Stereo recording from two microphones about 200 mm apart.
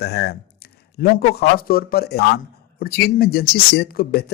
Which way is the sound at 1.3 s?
50° left (ahead or behind).